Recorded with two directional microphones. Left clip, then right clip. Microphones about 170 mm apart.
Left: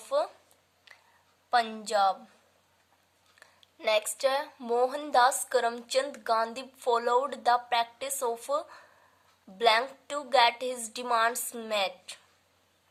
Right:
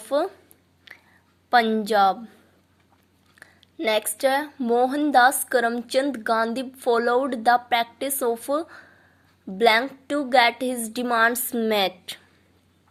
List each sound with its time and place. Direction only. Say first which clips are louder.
0.0 s speech: right 5 dB; 25° right (ahead or behind)
0.9 s whispering: right 9 dB; 30° right (ahead or behind)
1.5 s a woman's voice: right 8 dB; 30° right (ahead or behind)
3.4 s a woman's voice: right 5 dB; 25° right (ahead or behind)